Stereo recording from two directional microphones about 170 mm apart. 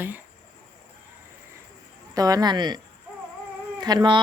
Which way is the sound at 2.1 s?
20° right (ahead or behind).